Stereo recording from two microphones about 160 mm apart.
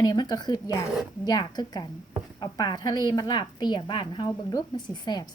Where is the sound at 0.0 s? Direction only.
25° left (ahead or behind).